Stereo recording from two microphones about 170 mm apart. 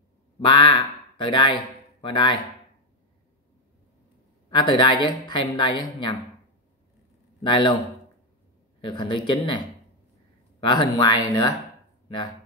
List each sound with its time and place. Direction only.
0.5 s speech: 30° left (ahead or behind)
4.5 s speech: 25° left (ahead or behind)
7.4 s speech: 25° left (ahead or behind)
8.8 s speech: 30° left (ahead or behind)
10.7 s speech: 25° left (ahead or behind)